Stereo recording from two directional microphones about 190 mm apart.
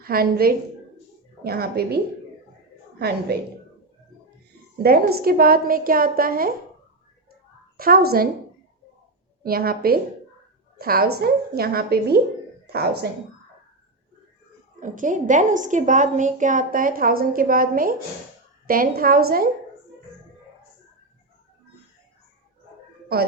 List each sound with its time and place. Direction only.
0.0 s a woman's voice: 50° right (ahead or behind)
3.3 s a woman's voice: 55° right (ahead or behind)
4.8 s a woman's voice: 55° right (ahead or behind)
7.8 s a woman's voice: 50° right (ahead or behind)
9.4 s a woman's voice: 50° right (ahead or behind)
14.8 s a woman's voice: 45° right (ahead or behind)